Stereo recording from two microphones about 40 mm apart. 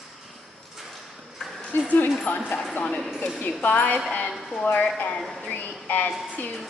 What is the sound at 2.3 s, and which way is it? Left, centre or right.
Speech, left.